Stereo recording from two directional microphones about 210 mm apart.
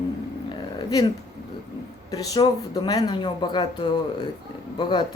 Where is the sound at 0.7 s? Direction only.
15° left (ahead or behind).